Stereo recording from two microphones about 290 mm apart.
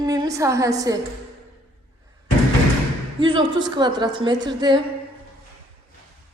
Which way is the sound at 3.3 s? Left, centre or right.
Centre.